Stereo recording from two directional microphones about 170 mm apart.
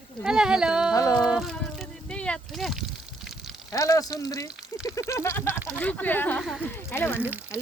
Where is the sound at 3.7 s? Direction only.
20° left (ahead or behind).